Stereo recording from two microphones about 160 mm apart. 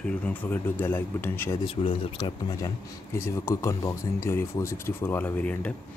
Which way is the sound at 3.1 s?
15° left (ahead or behind).